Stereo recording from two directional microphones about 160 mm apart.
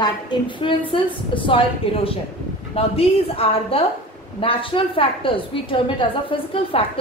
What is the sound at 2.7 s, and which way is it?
A woman's voice, 40° left (ahead or behind).